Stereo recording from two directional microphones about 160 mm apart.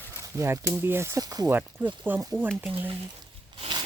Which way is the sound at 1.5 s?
10° right (ahead or behind).